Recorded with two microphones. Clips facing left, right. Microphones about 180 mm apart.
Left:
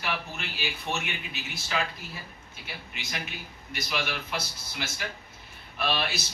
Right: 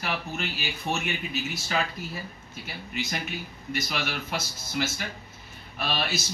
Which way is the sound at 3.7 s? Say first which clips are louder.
Right 2 dB; 45° right (ahead or behind).